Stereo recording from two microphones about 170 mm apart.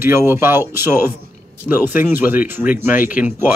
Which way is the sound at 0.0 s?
15° right (ahead or behind).